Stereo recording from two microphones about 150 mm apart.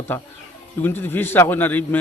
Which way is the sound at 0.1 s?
15° left (ahead or behind).